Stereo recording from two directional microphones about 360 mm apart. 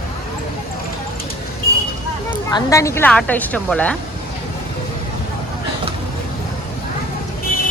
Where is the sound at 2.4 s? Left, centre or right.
Centre.